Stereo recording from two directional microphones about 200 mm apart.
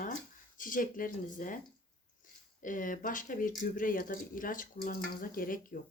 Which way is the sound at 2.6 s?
40° left (ahead or behind).